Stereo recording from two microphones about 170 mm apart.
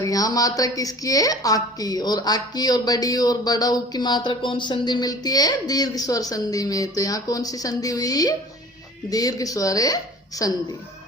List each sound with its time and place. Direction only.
0.0 s a woman's voice: 20° left (ahead or behind)